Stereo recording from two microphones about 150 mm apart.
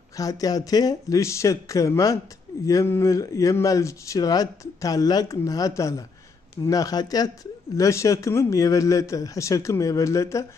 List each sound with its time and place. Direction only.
0.2 s speech: 25° left (ahead or behind)